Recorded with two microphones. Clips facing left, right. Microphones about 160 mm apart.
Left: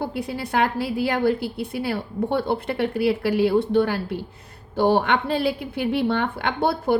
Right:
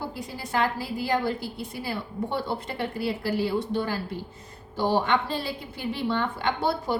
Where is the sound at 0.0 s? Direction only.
65° left (ahead or behind).